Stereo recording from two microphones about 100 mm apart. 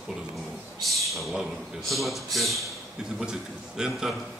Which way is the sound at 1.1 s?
Centre (ahead or behind).